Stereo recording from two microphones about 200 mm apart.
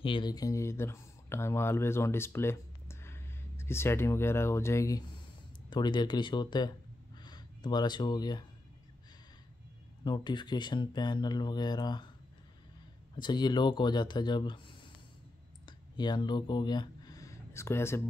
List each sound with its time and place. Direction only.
0.0 s speech: 25° left (ahead or behind)
10.0 s speech: 20° left (ahead or behind)
13.1 s speech: 20° left (ahead or behind)
15.6 s a sound: 20° left (ahead or behind)